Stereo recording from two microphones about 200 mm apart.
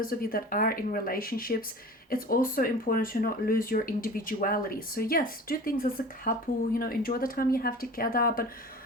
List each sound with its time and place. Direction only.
0.0 s speech: 45° left (ahead or behind)